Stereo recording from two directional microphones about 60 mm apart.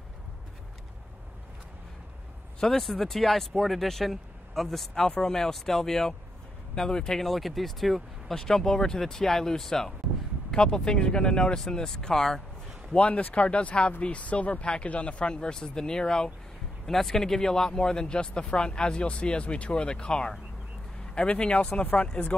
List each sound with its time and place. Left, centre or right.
2.6 s speech: centre
12.9 s speech: left